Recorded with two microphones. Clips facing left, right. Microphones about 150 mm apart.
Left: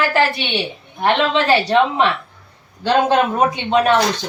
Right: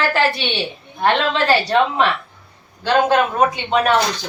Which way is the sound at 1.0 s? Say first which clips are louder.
Left 1 dB; 20° left (ahead or behind).